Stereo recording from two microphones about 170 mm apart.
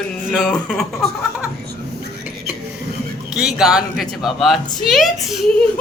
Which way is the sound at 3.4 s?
5° right (ahead or behind).